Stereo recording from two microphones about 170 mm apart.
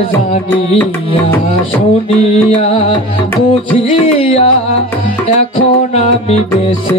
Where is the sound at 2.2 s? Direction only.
35° left (ahead or behind).